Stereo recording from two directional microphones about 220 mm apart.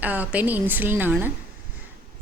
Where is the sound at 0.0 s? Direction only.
5° right (ahead or behind).